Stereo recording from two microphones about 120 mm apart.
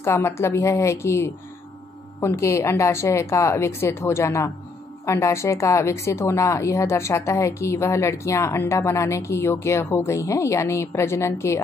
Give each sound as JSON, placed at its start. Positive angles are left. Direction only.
{"t": 0.0, "sound": "a woman's voice", "side_deg": 20}